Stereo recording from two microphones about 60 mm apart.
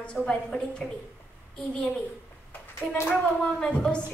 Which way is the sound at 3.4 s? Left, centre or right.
Centre.